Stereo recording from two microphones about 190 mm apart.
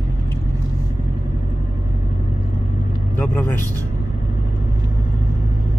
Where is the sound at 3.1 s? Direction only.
10° left (ahead or behind).